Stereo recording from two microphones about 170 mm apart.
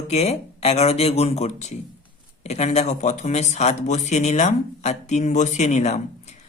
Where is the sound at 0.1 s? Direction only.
40° left (ahead or behind).